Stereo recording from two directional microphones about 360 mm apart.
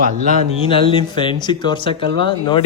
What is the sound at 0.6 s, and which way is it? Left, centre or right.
Speech, centre.